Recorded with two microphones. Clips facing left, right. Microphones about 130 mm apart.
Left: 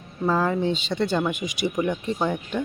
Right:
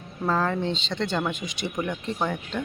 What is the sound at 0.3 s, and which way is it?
Speech, 10° left (ahead or behind).